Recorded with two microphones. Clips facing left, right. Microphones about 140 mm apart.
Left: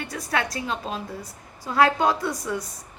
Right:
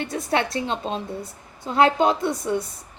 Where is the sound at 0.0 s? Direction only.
25° right (ahead or behind).